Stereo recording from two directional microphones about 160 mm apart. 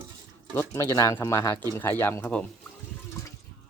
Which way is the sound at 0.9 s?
20° left (ahead or behind).